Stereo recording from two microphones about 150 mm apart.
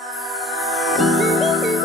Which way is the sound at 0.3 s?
Centre (ahead or behind).